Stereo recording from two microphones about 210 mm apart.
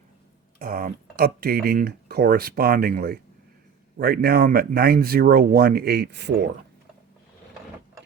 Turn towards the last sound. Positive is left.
turn(degrees=-55)  # may be behind; listen again after turning